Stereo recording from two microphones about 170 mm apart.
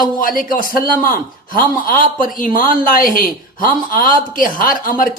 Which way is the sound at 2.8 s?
55° left (ahead or behind).